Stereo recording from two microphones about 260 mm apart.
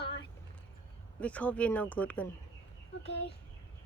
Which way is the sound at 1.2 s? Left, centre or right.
Centre.